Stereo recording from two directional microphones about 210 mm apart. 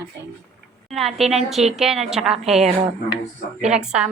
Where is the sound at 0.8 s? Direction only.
Centre (ahead or behind).